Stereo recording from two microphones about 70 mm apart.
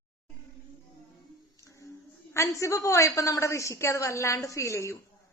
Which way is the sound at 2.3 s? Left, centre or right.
Left.